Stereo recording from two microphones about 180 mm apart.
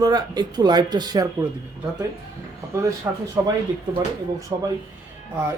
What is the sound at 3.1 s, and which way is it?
Speech, 15° right (ahead or behind).